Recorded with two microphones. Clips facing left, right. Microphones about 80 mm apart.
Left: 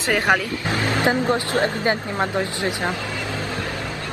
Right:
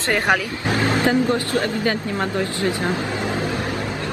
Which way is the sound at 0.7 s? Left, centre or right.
Right.